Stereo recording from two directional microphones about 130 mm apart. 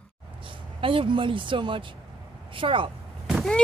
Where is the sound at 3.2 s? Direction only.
Centre (ahead or behind).